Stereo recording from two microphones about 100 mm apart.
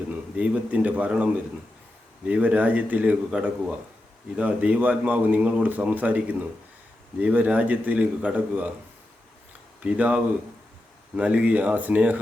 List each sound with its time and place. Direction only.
0.1 s speech: 15° right (ahead or behind)
9.8 s speech: 15° right (ahead or behind)
11.2 s speech: 15° right (ahead or behind)